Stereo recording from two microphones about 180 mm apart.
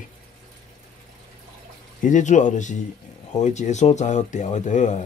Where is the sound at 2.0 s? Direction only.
45° left (ahead or behind).